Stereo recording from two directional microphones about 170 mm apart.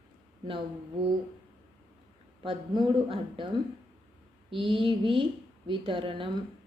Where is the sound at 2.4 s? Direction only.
30° right (ahead or behind).